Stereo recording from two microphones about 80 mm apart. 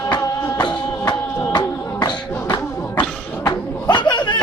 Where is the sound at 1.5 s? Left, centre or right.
Left.